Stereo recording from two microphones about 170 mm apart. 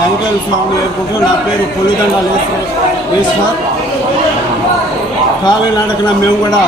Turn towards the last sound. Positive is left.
turn(degrees=25)  # may be behind; listen again after turning